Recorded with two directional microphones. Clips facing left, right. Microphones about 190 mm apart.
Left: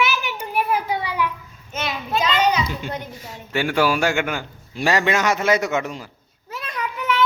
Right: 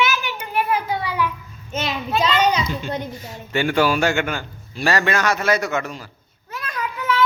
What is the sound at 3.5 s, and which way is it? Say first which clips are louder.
A man's voice: right 1 dB; 5° left (ahead or behind).